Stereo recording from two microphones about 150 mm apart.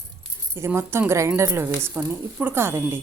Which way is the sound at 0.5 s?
15° right (ahead or behind).